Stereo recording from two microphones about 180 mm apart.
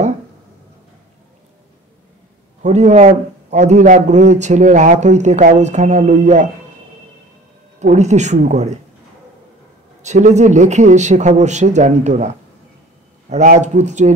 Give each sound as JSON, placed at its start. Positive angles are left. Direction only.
{"t": 2.6, "sound": "a man's voice", "side_deg": -40}
{"t": 7.8, "sound": "a man's voice", "side_deg": -40}
{"t": 10.0, "sound": "a man's voice", "side_deg": -40}
{"t": 13.3, "sound": "a man's voice", "side_deg": -40}